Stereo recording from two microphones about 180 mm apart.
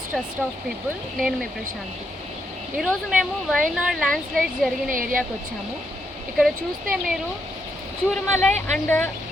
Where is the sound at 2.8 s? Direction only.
Centre (ahead or behind).